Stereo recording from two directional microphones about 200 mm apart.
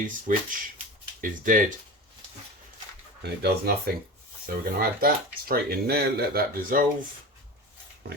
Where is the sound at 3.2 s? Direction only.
55° right (ahead or behind).